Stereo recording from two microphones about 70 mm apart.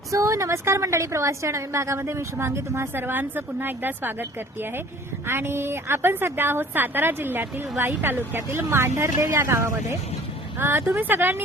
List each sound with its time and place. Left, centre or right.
0.1 s a woman's voice: right
2.9 s a woman's voice: right
10.6 s a woman's voice: right